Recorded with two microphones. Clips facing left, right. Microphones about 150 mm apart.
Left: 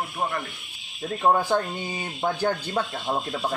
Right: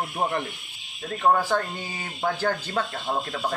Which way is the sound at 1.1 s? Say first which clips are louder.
Even; 15° left (ahead or behind).